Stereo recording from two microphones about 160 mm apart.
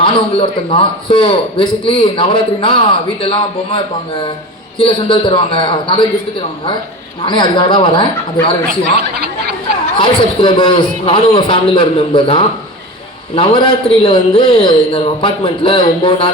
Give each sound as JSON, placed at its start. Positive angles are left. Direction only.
{"t": 0.0, "sound": "a man's voice", "side_deg": 30}
{"t": 4.8, "sound": "a man's voice", "side_deg": 30}
{"t": 7.2, "sound": "a man's voice", "side_deg": 30}
{"t": 10.0, "sound": "a man's voice", "side_deg": 30}